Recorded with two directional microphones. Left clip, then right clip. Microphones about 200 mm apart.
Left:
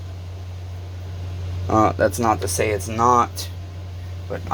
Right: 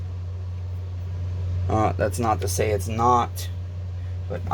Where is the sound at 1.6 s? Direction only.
10° left (ahead or behind).